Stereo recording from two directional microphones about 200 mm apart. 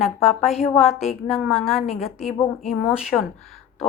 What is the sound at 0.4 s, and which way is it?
Speech, 30° left (ahead or behind).